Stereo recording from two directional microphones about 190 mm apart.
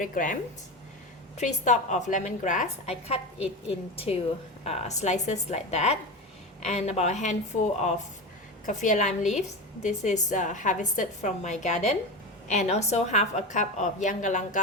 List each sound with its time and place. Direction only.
0.0 s a woman's voice: 45° left (ahead or behind)
1.4 s a woman's voice: 40° left (ahead or behind)
8.6 s a woman's voice: 40° left (ahead or behind)